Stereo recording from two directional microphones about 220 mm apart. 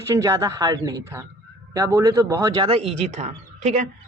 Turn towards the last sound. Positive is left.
turn(degrees=-30)  # may be behind; listen again after turning